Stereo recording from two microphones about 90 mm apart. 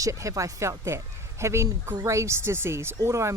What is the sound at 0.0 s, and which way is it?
Speech, 35° right (ahead or behind).